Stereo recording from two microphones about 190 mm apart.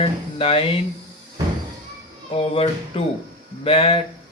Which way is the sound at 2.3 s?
30° left (ahead or behind).